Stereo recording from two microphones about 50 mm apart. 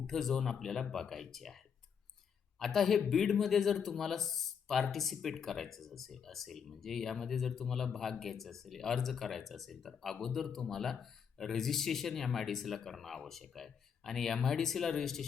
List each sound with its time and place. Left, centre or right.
0.1 s speech: centre